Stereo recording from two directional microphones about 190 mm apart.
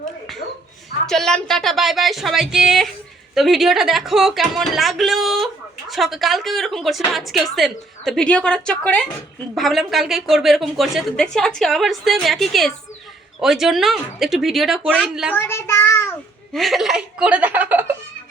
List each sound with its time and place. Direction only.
1.0 s a woman's voice: 5° left (ahead or behind)
15.4 s child singing: 15° left (ahead or behind)
16.5 s a woman's voice: centre (ahead or behind)